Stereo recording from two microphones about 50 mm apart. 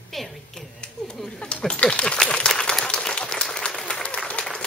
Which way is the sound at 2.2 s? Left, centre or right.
Centre.